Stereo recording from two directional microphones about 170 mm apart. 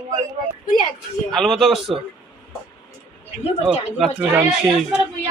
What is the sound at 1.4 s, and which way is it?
Speech, centre (ahead or behind).